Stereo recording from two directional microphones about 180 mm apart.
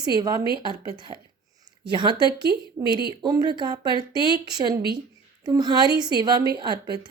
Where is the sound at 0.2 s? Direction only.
20° right (ahead or behind).